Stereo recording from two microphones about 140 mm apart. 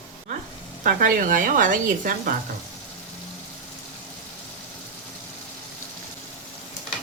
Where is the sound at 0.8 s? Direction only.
75° right (ahead or behind).